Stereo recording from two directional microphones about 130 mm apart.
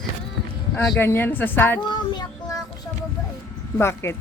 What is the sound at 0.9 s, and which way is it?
Speech, 15° left (ahead or behind).